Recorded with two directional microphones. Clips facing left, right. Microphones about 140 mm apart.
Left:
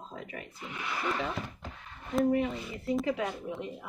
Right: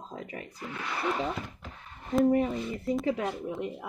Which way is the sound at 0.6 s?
15° left (ahead or behind).